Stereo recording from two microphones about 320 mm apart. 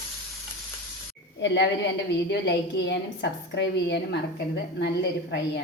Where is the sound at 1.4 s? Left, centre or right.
Left.